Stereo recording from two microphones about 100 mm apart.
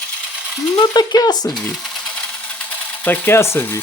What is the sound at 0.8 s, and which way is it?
Dishes, 45° left (ahead or behind).